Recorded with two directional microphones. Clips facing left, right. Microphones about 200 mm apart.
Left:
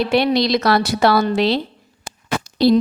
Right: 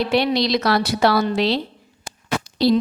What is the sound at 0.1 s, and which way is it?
A woman's voice, 50° left (ahead or behind).